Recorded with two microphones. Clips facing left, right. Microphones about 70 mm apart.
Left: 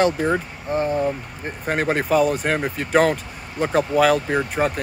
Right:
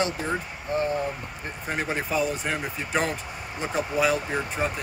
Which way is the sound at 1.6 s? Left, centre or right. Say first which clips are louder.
Left 7 dB; left.